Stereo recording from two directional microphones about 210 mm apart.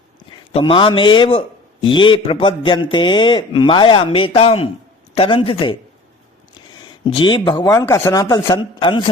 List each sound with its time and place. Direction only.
0.3 s a man's voice: 25° left (ahead or behind)
6.7 s a man's voice: 20° left (ahead or behind)